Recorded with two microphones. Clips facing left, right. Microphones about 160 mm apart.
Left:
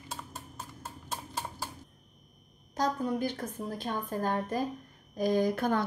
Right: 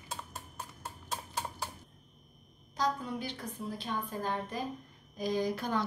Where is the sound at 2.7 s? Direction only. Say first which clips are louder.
Left 4 dB; 45° left (ahead or behind).